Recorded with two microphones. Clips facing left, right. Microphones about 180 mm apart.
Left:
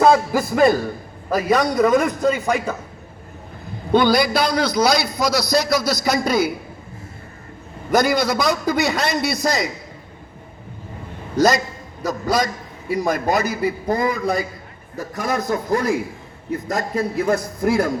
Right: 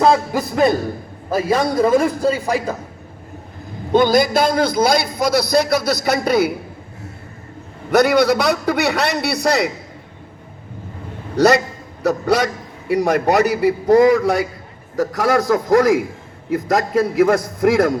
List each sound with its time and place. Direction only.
0.0 s music: centre (ahead or behind)
1.3 s a man's voice: 25° right (ahead or behind)
3.9 s a man's voice: 45° right (ahead or behind); by 6.5 s 60° right (ahead or behind)
7.9 s a man's voice: 70° right (ahead or behind)
11.3 s a man's voice: 65° right (ahead or behind); by 17.9 s 85° right